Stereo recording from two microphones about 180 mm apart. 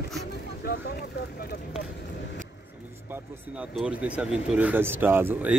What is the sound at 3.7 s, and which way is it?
Speech, 5° right (ahead or behind).